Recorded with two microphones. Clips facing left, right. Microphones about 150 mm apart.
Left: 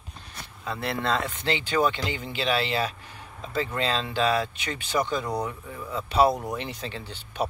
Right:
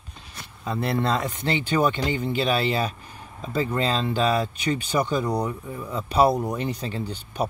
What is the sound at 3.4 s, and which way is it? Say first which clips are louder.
Speech: right 4 dB; 15° right (ahead or behind).